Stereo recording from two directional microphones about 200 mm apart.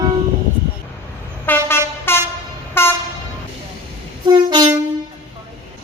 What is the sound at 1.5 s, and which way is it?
Train, 10° left (ahead or behind).